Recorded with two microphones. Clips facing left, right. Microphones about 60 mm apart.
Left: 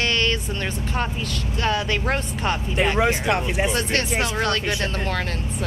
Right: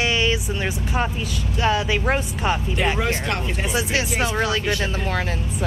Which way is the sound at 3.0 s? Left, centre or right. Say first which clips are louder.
Left 3 dB; centre.